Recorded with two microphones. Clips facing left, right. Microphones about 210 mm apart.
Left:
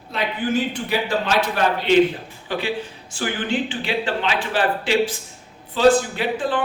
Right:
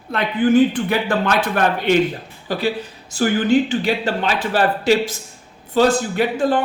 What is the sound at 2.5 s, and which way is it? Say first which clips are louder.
Speech: right 3 dB; 40° right (ahead or behind).